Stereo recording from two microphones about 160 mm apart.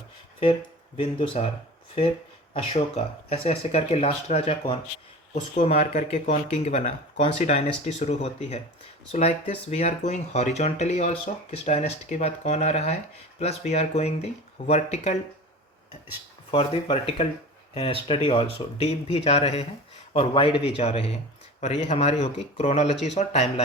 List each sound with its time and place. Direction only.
0.9 s speech: 35° left (ahead or behind)
2.5 s speech: 35° left (ahead or behind)
16.5 s speech: 40° left (ahead or behind)